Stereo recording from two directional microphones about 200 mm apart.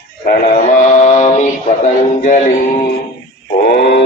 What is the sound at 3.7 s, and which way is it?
Mantra, 60° left (ahead or behind).